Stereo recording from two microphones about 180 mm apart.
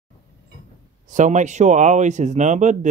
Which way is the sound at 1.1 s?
45° right (ahead or behind).